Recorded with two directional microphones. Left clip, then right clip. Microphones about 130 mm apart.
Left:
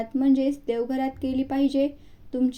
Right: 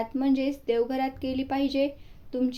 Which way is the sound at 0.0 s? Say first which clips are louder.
Left 3 dB; 35° left (ahead or behind).